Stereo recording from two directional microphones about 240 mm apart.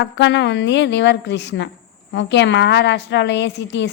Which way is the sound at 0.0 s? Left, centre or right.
Left.